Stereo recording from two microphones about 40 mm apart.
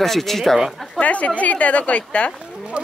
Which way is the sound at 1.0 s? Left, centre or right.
Left.